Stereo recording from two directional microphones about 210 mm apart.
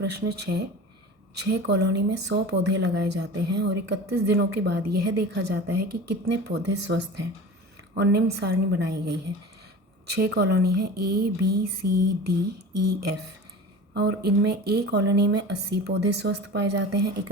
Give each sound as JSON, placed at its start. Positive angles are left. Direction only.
{"t": 0.0, "sound": "speech", "side_deg": -50}